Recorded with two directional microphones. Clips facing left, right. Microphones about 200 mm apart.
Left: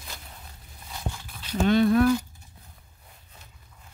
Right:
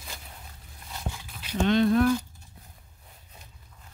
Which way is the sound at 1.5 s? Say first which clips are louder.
Left 2 dB; 5° left (ahead or behind).